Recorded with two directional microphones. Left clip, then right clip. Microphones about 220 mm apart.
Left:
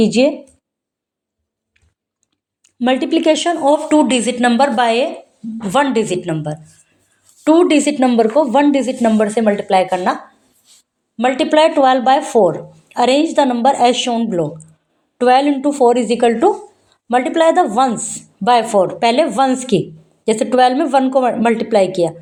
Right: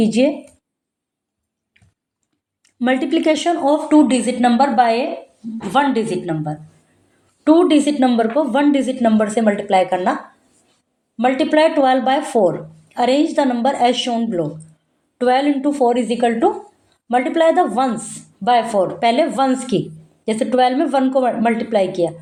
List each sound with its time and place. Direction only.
0.0 s speech: 25° left (ahead or behind)
2.6 s speech: 25° left (ahead or behind)
11.2 s speech: 30° left (ahead or behind)